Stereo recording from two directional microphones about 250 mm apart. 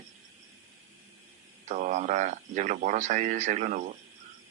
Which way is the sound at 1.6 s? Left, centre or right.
Right.